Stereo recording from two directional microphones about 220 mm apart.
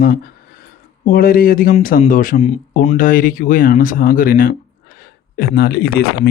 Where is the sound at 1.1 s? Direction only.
40° left (ahead or behind).